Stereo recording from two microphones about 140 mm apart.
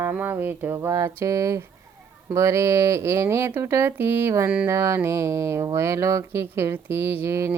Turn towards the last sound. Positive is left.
turn(degrees=-20)  # may be behind; listen again after turning